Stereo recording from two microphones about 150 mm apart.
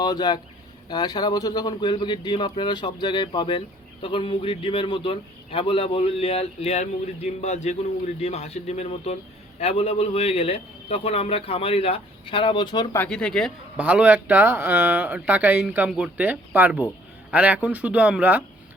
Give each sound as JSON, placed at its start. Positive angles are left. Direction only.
{"t": 0.0, "sound": "a man's voice", "side_deg": 30}
{"t": 13.0, "sound": "speech", "side_deg": 5}
{"t": 13.7, "sound": "speech", "side_deg": -10}